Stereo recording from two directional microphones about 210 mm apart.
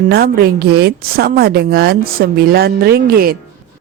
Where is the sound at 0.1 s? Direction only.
45° right (ahead or behind).